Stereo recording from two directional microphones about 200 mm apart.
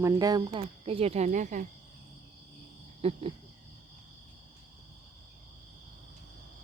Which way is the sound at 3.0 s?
30° right (ahead or behind).